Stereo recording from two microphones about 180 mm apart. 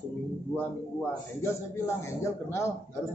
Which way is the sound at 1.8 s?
15° left (ahead or behind).